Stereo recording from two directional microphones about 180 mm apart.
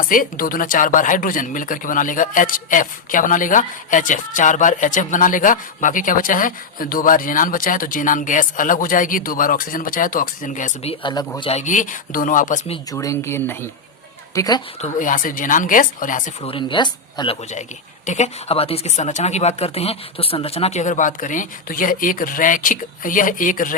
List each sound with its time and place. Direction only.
0.0 s speech: 50° left (ahead or behind)
11.0 s speech: 25° left (ahead or behind)
11.3 s speech: 35° left (ahead or behind)
12.9 s speech: 20° left (ahead or behind)
14.8 s speech: 45° left (ahead or behind)
16.4 s speech: 30° left (ahead or behind)
18.0 s speech: 40° left (ahead or behind)